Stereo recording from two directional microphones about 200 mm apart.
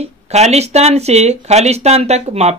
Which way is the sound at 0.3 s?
35° right (ahead or behind).